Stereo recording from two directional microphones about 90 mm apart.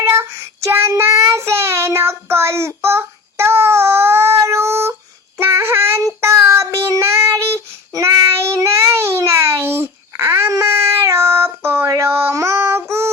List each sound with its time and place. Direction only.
0.0 s child singing: 30° right (ahead or behind)
11.9 s female singing: 30° right (ahead or behind)